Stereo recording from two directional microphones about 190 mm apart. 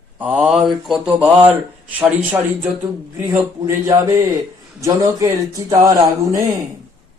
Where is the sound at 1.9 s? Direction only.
10° right (ahead or behind).